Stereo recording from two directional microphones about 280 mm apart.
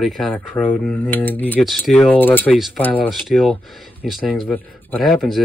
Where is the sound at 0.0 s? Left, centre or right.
Centre.